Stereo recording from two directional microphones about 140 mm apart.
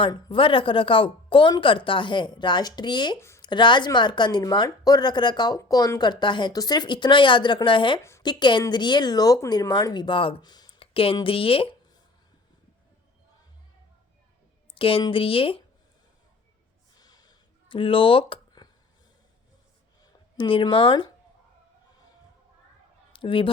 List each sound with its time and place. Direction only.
0.0 s speech: 35° left (ahead or behind)
3.2 s speech: 20° left (ahead or behind)
3.4 s speech: 35° left (ahead or behind)
14.8 s a woman's voice: 40° left (ahead or behind)
17.0 s a sound: 30° left (ahead or behind)
20.3 s speech: 40° left (ahead or behind)
23.1 s speech: 40° left (ahead or behind)